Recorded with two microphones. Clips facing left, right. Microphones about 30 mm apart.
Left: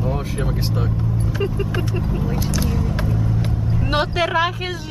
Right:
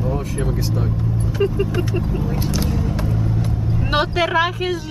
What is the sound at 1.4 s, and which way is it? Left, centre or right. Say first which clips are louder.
Speech: right 5 dB; centre.